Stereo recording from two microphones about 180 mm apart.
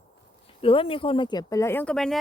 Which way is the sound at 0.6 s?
30° left (ahead or behind).